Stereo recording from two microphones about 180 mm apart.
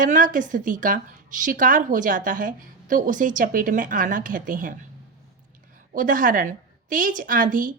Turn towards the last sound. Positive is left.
turn(degrees=-50)  # may be behind; listen again after turning